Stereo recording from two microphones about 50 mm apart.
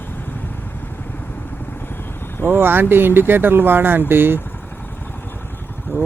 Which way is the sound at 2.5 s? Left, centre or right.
Right.